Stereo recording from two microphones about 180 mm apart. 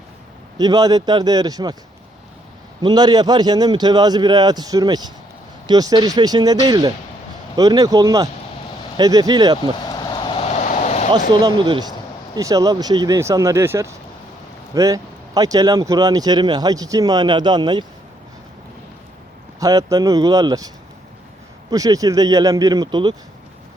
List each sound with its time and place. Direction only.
0.6 s speech: 20° right (ahead or behind)
2.8 s speech: 25° right (ahead or behind)
9.7 s vehicle: 25° left (ahead or behind); by 11.0 s 40° left (ahead or behind)
11.3 s speech: 25° right (ahead or behind)
19.5 s speech: 20° right (ahead or behind)
21.7 s speech: 20° right (ahead or behind)